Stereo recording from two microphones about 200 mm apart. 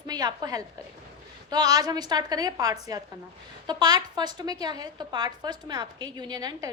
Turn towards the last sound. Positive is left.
turn(degrees=-20)  # may be behind; listen again after turning